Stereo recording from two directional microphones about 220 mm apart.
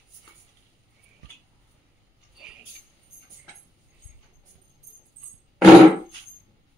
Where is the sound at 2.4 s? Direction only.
Centre (ahead or behind).